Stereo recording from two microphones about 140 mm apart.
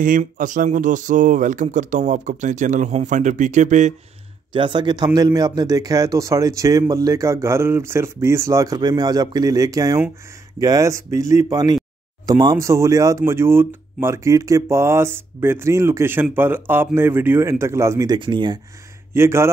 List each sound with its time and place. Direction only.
0.0 s speech: 70° right (ahead or behind)
4.6 s speech: 35° right (ahead or behind)
19.1 s speech: 20° right (ahead or behind)